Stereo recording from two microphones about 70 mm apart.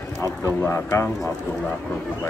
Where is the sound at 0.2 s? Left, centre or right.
Left.